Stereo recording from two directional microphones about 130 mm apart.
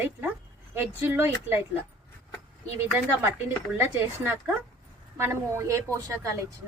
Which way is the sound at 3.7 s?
20° right (ahead or behind).